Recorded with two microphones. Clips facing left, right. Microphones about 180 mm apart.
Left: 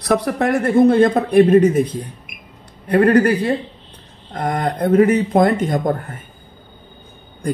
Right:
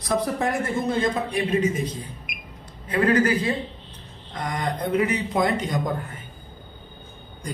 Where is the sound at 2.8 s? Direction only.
60° left (ahead or behind).